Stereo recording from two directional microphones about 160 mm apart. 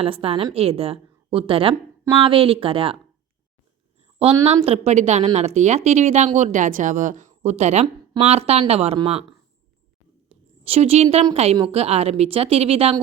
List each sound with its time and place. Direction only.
0.0 s a woman's voice: 35° right (ahead or behind)
4.4 s a woman's voice: 40° right (ahead or behind)
10.2 s a sound: 40° right (ahead or behind)
11.5 s a woman's voice: 35° right (ahead or behind)